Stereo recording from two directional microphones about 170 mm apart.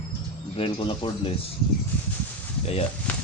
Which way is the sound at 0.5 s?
30° left (ahead or behind).